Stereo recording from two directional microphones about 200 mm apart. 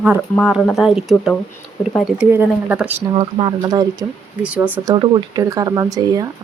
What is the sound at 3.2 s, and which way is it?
Speech, 25° right (ahead or behind).